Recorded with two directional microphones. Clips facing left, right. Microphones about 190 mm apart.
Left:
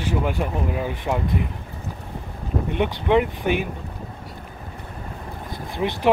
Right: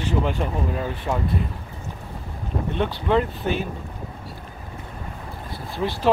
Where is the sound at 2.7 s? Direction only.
15° left (ahead or behind).